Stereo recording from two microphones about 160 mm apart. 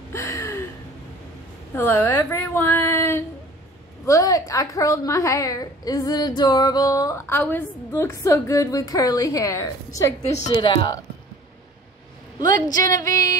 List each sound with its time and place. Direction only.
0.1 s a sound: 20° left (ahead or behind)
1.8 s a woman's voice: 15° left (ahead or behind); by 11.0 s 30° left (ahead or behind)
12.5 s a woman's voice: 25° left (ahead or behind)